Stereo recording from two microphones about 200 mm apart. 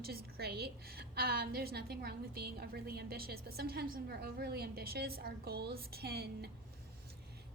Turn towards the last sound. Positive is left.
turn(degrees=-50)  # may be behind; listen again after turning